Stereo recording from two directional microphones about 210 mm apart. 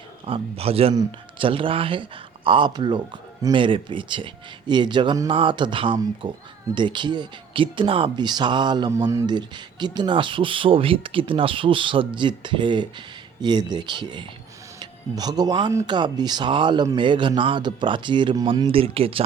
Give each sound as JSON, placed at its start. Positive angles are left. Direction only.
{"t": 0.3, "sound": "speech", "side_deg": -25}